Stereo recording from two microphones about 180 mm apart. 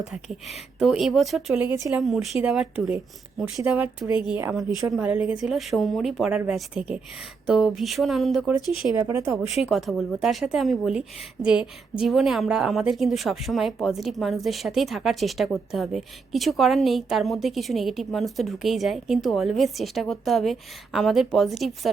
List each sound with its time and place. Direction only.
0.1 s a woman's voice: centre (ahead or behind)
8.7 s speech: 30° left (ahead or behind)
9.0 s a woman's voice: 15° right (ahead or behind)
9.3 s a woman's voice: centre (ahead or behind)